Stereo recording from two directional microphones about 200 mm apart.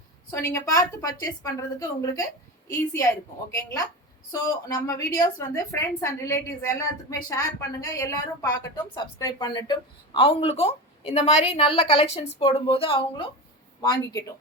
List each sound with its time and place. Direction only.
0.3 s a woman's voice: 15° left (ahead or behind)
4.3 s a woman's voice: 15° left (ahead or behind)